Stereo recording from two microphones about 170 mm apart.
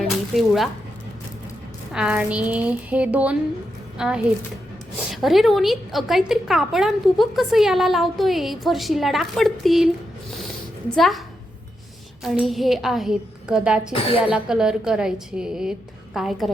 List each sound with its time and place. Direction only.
0.0 s a sound: centre (ahead or behind)
1.9 s a woman's voice: 5° right (ahead or behind)
10.9 s a woman's voice: centre (ahead or behind)
12.2 s a woman's voice: centre (ahead or behind)
13.9 s speech: 35° left (ahead or behind)
14.2 s a woman's voice: 5° right (ahead or behind)